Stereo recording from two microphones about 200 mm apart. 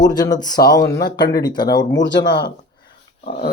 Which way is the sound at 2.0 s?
65° left (ahead or behind).